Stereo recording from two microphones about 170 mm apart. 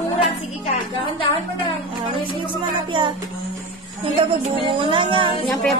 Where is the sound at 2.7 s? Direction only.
25° right (ahead or behind).